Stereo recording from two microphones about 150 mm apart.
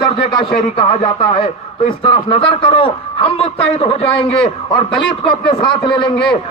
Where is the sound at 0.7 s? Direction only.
40° left (ahead or behind).